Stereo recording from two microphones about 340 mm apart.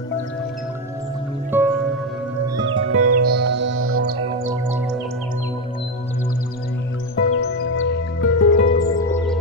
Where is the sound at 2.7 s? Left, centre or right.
Right.